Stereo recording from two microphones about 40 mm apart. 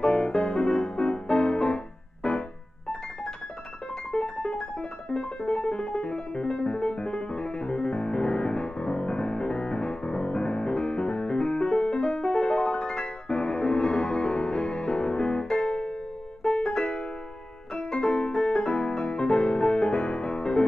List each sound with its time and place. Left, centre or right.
0.0 s music: left
4.1 s keyboard: left
16.4 s music: left
17.9 s music: left